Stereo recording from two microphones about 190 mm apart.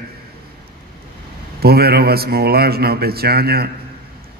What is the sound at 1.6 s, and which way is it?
A man's voice, 55° right (ahead or behind).